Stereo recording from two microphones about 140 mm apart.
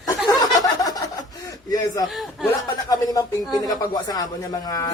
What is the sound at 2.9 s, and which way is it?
A man's voice, 25° left (ahead or behind).